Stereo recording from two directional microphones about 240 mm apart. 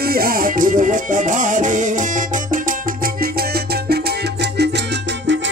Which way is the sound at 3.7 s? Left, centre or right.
Right.